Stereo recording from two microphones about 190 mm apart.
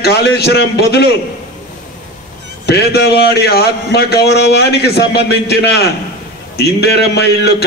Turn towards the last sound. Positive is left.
turn(degrees=60)  # may be behind; listen again after turning